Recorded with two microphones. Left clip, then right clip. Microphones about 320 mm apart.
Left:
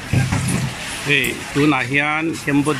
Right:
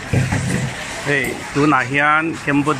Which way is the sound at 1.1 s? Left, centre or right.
Centre.